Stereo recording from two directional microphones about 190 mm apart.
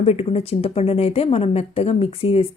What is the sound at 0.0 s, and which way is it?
A woman's voice, 35° left (ahead or behind).